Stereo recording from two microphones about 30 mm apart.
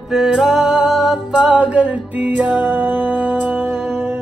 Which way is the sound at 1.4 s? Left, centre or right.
Right.